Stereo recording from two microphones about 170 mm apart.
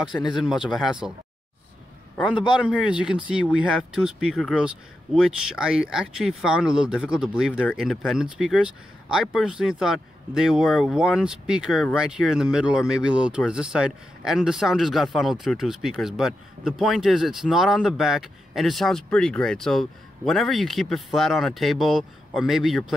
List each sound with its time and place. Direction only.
0.0 s speech: 5° right (ahead or behind)
2.5 s speech: 5° right (ahead or behind)